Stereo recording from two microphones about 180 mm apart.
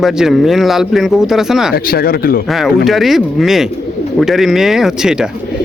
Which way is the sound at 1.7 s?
55° left (ahead or behind).